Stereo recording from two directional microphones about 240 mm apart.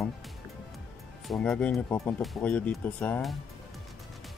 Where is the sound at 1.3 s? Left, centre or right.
Centre.